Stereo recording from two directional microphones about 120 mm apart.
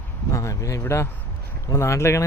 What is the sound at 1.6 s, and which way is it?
Speech, 25° left (ahead or behind).